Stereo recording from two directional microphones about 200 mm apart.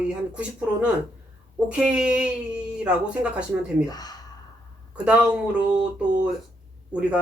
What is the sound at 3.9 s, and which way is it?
Speech, 20° left (ahead or behind).